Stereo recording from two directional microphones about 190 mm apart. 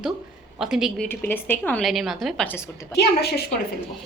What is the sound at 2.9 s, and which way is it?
Speech, 60° left (ahead or behind).